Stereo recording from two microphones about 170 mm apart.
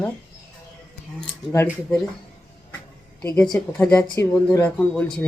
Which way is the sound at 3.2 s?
10° left (ahead or behind).